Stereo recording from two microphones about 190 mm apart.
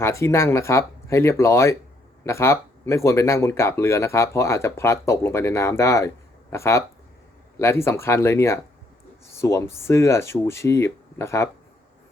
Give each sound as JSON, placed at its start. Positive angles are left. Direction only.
{"t": 0.0, "sound": "speech", "side_deg": 15}